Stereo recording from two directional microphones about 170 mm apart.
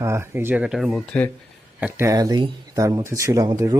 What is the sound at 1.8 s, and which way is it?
Speech, 10° right (ahead or behind).